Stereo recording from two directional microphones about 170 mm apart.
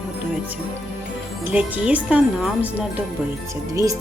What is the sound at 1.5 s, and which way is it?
A woman's voice, 10° right (ahead or behind).